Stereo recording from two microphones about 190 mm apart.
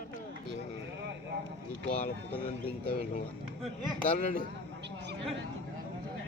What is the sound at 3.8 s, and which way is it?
Speech, 25° right (ahead or behind).